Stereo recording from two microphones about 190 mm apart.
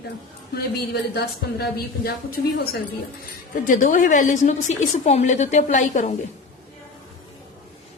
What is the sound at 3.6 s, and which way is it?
A woman's voice, 40° left (ahead or behind).